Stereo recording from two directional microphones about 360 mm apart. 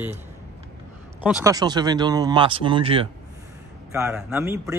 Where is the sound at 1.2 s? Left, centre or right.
Centre.